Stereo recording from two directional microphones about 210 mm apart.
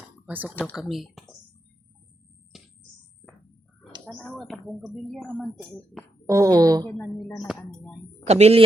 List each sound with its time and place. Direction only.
0.3 s a woman's voice: 5° right (ahead or behind)
2.5 s a sound: centre (ahead or behind)
4.0 s speech: centre (ahead or behind)
6.2 s a woman's voice: 15° right (ahead or behind)
6.8 s speech: 10° left (ahead or behind)
8.2 s speech: 30° right (ahead or behind)